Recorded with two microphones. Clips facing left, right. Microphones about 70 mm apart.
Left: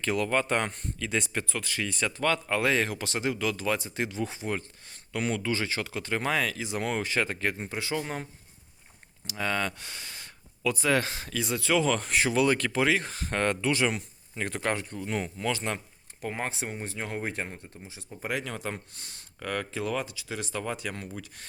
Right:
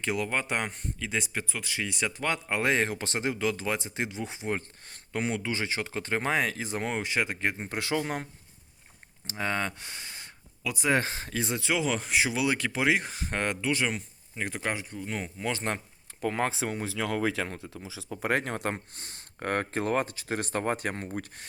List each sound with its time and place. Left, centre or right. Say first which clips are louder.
0.0 s speech: left 3 dB; centre; by 6.8 s right
6.8 s speech: left 1 dB; right
7.7 s speech: right 2 dB; right
9.2 s speech: left 1 dB; right; by 15.3 s centre
15.5 s speech: right 1 dB; right
16.3 s speech: right 3 dB; right
18.3 s speech: right 4 dB; right